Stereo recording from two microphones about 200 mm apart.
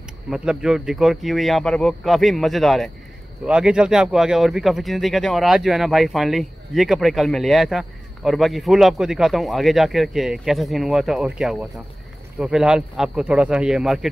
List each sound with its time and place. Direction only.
0.3 s speech: 5° right (ahead or behind)